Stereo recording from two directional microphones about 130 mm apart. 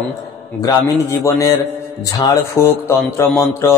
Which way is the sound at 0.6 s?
25° left (ahead or behind).